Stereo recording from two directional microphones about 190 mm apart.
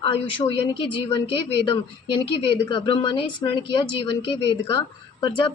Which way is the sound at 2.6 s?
25° left (ahead or behind).